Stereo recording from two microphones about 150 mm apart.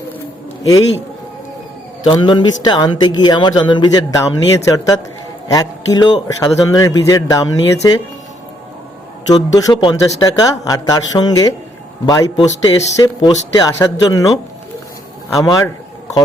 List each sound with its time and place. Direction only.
0.6 s speech: 25° left (ahead or behind)
2.0 s speech: 30° left (ahead or behind)
9.2 s speech: 25° left (ahead or behind)